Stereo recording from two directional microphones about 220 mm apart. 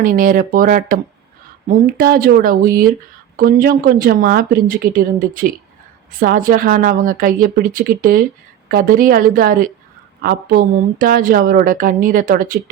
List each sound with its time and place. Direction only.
0.0 s a woman's voice: 40° right (ahead or behind)